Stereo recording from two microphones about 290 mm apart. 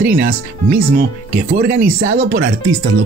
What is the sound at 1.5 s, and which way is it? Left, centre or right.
Speech, right.